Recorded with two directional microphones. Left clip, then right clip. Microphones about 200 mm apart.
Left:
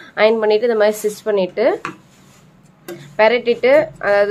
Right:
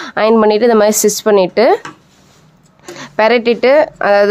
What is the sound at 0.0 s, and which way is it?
A woman's voice, 35° right (ahead or behind).